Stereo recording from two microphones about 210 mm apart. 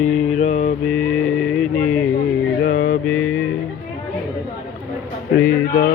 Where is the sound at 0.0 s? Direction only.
35° left (ahead or behind).